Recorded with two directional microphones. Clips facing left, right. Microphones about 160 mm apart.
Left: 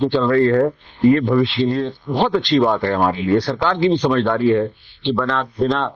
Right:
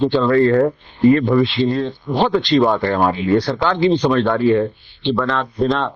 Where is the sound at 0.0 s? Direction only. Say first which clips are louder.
Right 1 dB; 25° right (ahead or behind).